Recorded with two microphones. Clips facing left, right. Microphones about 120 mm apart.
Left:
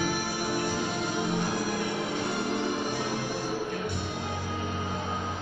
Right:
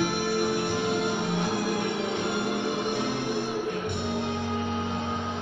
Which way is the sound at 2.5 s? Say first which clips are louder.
Right 1 dB; 60° right (ahead or behind).